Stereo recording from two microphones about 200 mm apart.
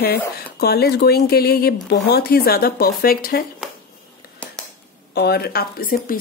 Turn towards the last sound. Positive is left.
turn(degrees=45)  # may be behind; listen again after turning